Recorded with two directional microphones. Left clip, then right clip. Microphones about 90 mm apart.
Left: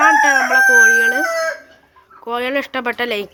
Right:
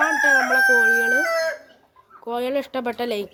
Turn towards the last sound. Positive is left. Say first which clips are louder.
# left 5 dB
turn(degrees=-10)  # may be behind; listen again after turning